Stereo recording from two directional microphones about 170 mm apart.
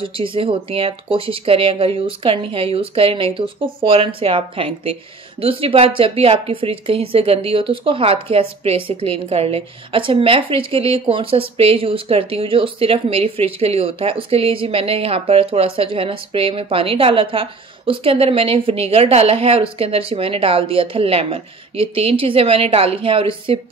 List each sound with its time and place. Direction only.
0.0 s a woman's voice: 30° right (ahead or behind)